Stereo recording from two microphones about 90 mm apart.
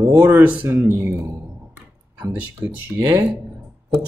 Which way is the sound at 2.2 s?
25° right (ahead or behind).